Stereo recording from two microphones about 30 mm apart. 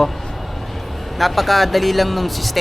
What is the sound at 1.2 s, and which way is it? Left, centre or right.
Speech, centre.